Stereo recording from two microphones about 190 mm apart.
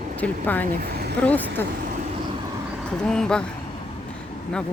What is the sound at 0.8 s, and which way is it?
Vehicle, 55° right (ahead or behind).